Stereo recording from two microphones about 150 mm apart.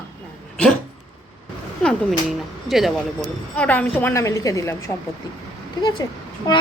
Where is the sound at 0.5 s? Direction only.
5° left (ahead or behind).